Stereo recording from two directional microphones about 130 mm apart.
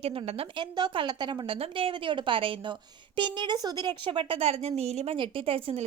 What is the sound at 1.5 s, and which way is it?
A woman's voice, 50° right (ahead or behind).